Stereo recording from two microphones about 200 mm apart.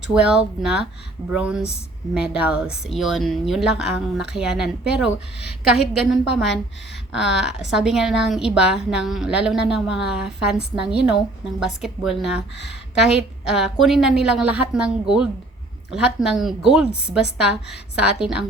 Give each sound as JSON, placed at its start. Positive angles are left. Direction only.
{"t": 0.1, "sound": "a woman's voice", "side_deg": -5}
{"t": 7.2, "sound": "a woman's voice", "side_deg": -5}
{"t": 15.9, "sound": "a woman's voice", "side_deg": 0}